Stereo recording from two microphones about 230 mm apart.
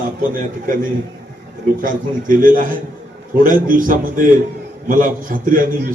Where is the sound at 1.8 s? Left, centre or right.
Right.